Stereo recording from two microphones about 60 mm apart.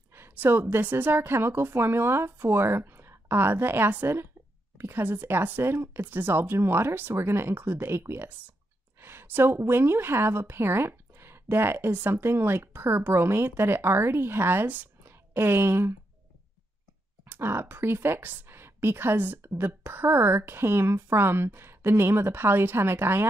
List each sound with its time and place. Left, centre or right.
0.1 s a sound: right
0.4 s a woman's voice: right
17.3 s a woman's voice: right